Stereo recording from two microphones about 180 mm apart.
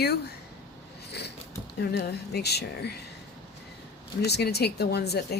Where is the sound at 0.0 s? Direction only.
65° left (ahead or behind).